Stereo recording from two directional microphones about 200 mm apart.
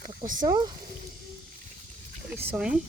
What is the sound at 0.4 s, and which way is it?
Speech, 20° right (ahead or behind).